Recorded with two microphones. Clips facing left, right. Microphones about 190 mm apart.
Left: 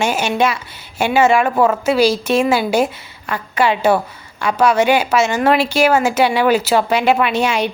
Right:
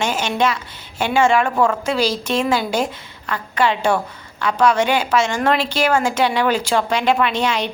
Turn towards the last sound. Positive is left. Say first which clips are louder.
# left 3 dB
turn(degrees=10)  # may be behind; listen again after turning